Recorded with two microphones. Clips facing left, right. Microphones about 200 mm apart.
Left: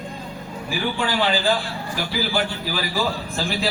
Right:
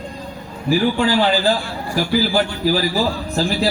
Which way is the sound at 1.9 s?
40° right (ahead or behind).